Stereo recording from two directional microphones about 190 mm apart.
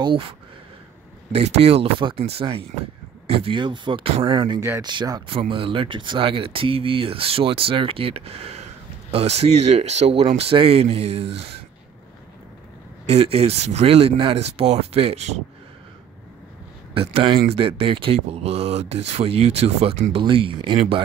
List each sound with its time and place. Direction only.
0.0 s speech: 30° right (ahead or behind)
1.3 s speech: 35° right (ahead or behind)
13.0 s speech: 35° right (ahead or behind)
16.9 s speech: 30° right (ahead or behind)